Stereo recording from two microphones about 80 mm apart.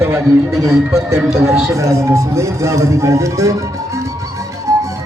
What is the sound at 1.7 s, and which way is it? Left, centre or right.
Speech, right.